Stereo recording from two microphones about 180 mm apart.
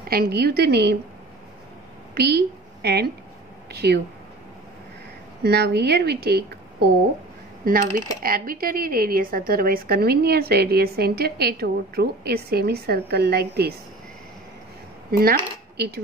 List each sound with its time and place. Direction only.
0.1 s a woman's voice: 60° right (ahead or behind)
2.1 s a woman's voice: 60° right (ahead or behind)
5.4 s a woman's voice: 65° right (ahead or behind)
8.2 s a woman's voice: 55° right (ahead or behind)
15.0 s speech: 55° right (ahead or behind)